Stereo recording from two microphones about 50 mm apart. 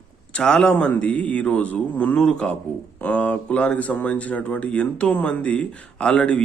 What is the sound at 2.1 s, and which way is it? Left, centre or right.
A man's voice, centre.